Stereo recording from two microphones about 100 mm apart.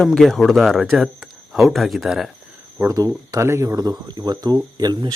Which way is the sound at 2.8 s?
30° right (ahead or behind).